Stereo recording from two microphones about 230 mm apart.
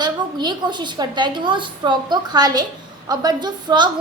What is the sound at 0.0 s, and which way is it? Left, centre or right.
A woman's voice, centre.